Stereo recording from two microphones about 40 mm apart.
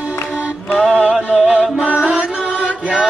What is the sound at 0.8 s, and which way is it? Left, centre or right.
Music, centre.